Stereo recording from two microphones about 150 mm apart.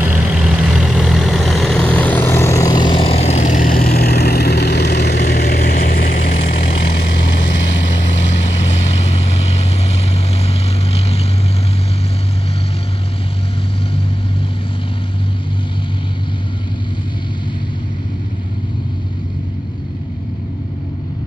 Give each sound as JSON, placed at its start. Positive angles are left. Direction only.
{"t": 0.0, "sound": "vehicle", "side_deg": -5}
{"t": 8.2, "sound": "vehicle", "side_deg": 50}